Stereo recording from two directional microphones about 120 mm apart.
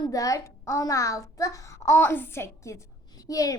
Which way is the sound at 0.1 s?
30° left (ahead or behind).